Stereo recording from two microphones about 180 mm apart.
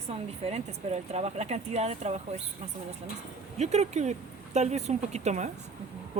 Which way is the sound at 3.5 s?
40° right (ahead or behind).